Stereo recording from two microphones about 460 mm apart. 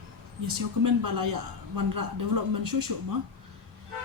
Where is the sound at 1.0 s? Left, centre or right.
Right.